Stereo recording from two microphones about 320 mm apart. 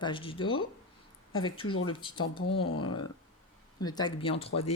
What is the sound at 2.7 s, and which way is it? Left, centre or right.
Speech, left.